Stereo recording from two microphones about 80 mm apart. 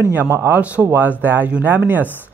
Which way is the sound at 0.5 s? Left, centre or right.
Centre.